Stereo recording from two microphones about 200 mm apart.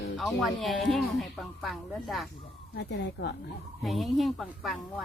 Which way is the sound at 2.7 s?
60° left (ahead or behind).